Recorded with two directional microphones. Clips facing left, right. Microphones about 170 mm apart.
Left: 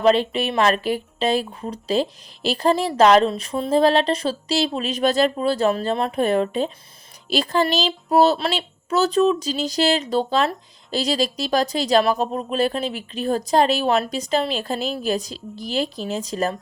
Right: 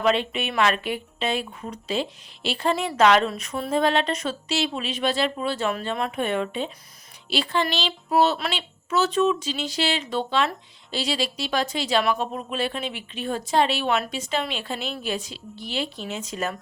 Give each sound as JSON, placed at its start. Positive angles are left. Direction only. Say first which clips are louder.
{"t": 0.0, "sound": "speech", "louder": "left 5 dB", "side_deg": 35}